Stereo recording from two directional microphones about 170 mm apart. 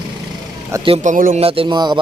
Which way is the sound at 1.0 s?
50° right (ahead or behind).